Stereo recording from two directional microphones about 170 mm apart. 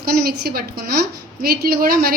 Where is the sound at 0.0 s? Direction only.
65° right (ahead or behind).